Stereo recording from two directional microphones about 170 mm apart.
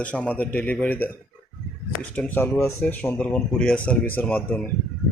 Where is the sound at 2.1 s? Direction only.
10° left (ahead or behind).